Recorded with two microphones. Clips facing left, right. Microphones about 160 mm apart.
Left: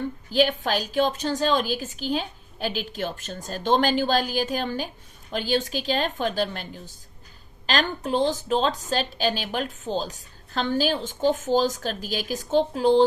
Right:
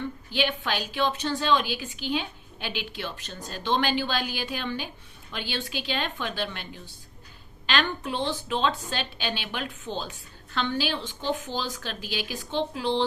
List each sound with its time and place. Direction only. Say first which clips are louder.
0.0 s a woman's voice: left 6 dB; 40° left (ahead or behind)